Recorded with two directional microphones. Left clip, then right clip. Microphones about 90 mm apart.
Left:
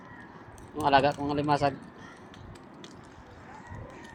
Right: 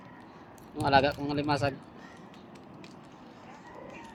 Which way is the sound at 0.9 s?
30° right (ahead or behind).